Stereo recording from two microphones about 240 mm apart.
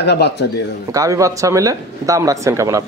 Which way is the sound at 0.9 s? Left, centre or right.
Centre.